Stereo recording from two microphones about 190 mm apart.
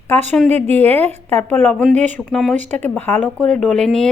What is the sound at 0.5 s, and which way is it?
Speech, 35° right (ahead or behind).